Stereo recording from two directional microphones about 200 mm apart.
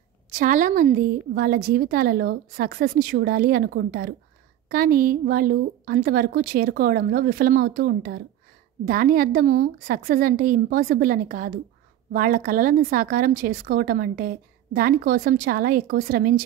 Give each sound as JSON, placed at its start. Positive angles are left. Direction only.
{"t": 0.3, "sound": "speech", "side_deg": -40}